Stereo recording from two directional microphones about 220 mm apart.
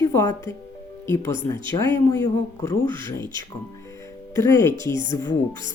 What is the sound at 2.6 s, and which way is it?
Speech, 15° left (ahead or behind).